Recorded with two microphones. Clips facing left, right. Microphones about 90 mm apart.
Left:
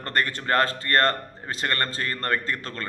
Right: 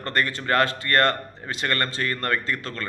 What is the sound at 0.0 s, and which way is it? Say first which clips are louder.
Speech: right 1 dB; 45° left (ahead or behind).